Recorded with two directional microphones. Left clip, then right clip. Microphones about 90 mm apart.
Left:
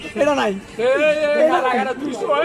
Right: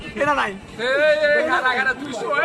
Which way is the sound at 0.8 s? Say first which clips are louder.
Left 1 dB; 25° left (ahead or behind).